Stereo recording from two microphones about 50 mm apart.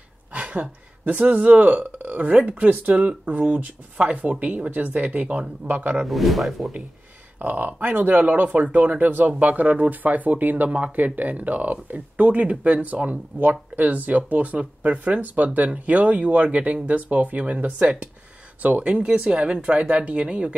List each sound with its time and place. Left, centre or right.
0.3 s speech: right
6.0 s speech: centre
7.3 s speech: right